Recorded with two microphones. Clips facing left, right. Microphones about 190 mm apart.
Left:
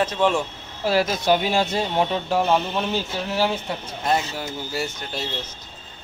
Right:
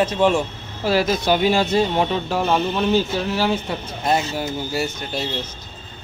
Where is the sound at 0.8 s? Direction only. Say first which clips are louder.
Right 2 dB; 90° right.